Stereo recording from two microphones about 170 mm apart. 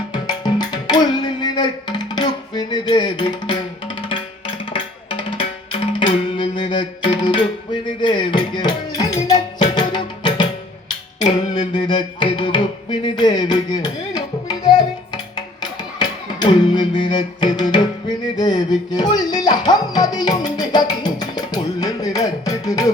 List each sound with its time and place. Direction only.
0.1 s music: 25° left (ahead or behind)
10.8 s a sound: 25° left (ahead or behind)
11.7 s music: 25° left (ahead or behind)